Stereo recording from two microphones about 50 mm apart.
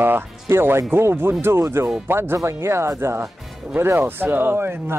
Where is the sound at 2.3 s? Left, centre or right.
Right.